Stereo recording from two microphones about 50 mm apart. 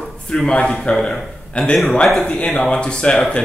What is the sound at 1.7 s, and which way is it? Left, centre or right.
Speech, centre.